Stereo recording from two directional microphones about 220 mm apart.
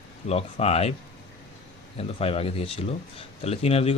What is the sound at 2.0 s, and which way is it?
Speech, 25° left (ahead or behind).